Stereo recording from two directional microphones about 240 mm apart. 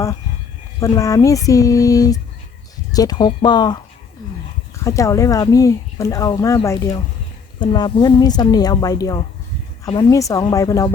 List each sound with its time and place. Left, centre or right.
0.8 s speech: centre
4.8 s speech: centre